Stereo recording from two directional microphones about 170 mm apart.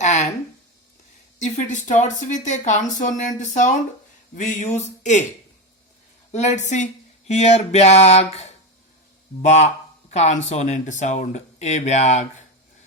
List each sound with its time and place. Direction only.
0.0 s a sound: 45° left (ahead or behind)
1.4 s speech: 45° left (ahead or behind)
6.3 s speech: 45° left (ahead or behind)